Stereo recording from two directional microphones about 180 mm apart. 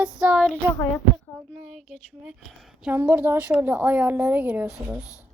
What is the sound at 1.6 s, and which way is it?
A woman's voice, centre (ahead or behind).